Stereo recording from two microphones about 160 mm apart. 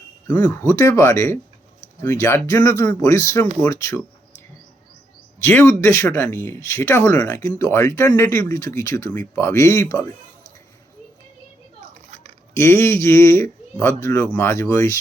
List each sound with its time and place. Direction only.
0.3 s speech: 10° left (ahead or behind)
5.4 s speech: 15° left (ahead or behind)
12.5 s speech: 15° left (ahead or behind)